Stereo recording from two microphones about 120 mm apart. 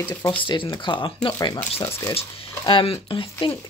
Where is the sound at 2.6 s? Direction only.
45° left (ahead or behind).